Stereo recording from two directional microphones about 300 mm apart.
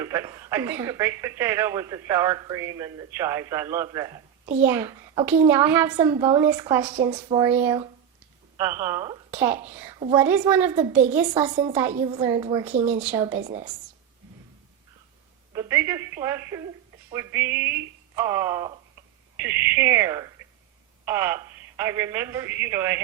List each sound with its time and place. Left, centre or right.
0.0 s a woman's voice: centre
11.9 s a woman's voice: right
12.2 s a woman's voice: centre
15.5 s a woman's voice: centre